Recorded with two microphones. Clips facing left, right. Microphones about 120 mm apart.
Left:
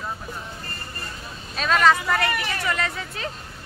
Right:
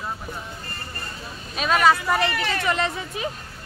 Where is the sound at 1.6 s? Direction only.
10° right (ahead or behind).